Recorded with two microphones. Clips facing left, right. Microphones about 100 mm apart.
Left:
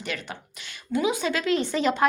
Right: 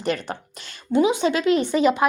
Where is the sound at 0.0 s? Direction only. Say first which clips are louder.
Right 8 dB; 40° right (ahead or behind).